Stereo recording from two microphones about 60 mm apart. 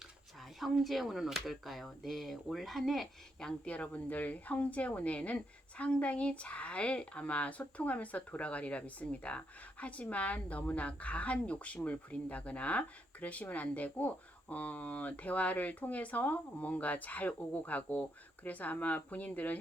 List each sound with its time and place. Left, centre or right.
0.6 s speech: centre
3.7 s a woman's voice: left